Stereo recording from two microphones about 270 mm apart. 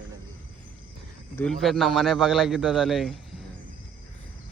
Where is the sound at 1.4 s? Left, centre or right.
Centre.